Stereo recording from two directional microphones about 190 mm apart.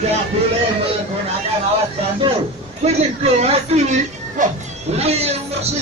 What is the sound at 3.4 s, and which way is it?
Speech, 35° right (ahead or behind).